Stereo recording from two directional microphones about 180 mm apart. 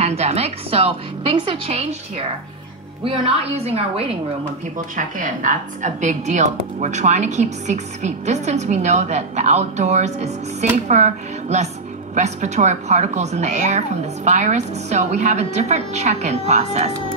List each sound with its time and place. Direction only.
0.0 s a woman's voice: 35° right (ahead or behind)
4.9 s a woman's voice: 45° right (ahead or behind)